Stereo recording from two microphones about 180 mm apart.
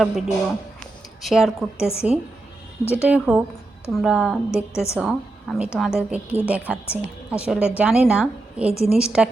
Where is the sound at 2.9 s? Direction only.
5° right (ahead or behind).